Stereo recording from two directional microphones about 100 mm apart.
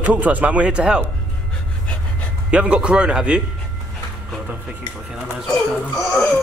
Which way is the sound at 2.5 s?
10° right (ahead or behind).